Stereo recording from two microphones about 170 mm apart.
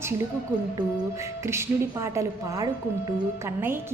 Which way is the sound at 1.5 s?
15° right (ahead or behind).